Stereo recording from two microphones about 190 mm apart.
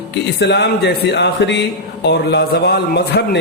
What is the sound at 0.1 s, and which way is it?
A man's voice, 65° left (ahead or behind).